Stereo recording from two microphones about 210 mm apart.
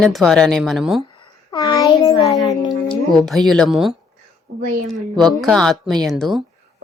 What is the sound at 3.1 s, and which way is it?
Speech, centre (ahead or behind).